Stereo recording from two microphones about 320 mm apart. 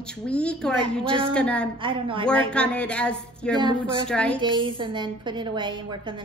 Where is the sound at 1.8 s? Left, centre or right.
Centre.